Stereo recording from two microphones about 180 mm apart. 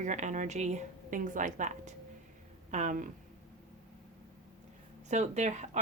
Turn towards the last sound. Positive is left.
turn(degrees=-40)  # may be behind; listen again after turning